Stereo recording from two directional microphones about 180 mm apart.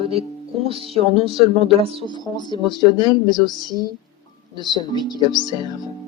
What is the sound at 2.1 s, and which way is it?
Speech, 25° left (ahead or behind).